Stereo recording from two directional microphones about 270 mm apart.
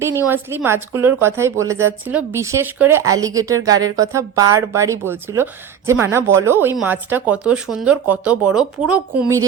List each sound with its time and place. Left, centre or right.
0.3 s a woman's voice: centre